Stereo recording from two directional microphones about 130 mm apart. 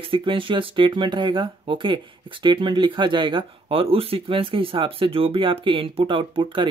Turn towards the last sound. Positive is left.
turn(degrees=-40)  # may be behind; listen again after turning